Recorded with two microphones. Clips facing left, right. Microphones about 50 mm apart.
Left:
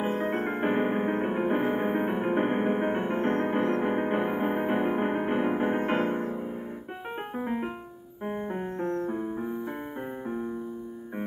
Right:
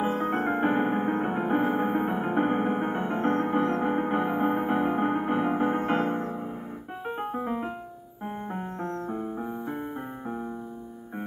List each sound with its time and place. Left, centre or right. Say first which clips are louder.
0.0 s music: right 2 dB; centre
7.1 s music: right 2 dB; left